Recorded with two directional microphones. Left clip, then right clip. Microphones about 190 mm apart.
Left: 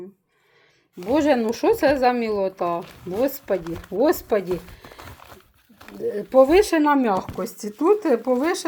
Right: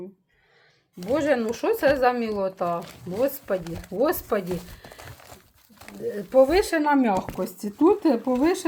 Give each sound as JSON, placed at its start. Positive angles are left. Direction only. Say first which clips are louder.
{"t": 1.1, "sound": "speech", "louder": "left 3 dB", "side_deg": 20}
{"t": 6.1, "sound": "speech", "louder": "left 3 dB", "side_deg": 20}